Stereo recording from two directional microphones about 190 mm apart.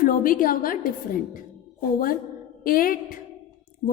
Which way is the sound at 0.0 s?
45° left (ahead or behind).